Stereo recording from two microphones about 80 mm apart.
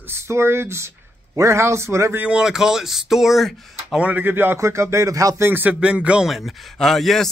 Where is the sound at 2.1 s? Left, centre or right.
Centre.